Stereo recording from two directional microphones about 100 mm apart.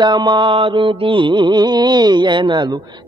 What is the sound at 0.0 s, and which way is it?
Mantra, 50° right (ahead or behind).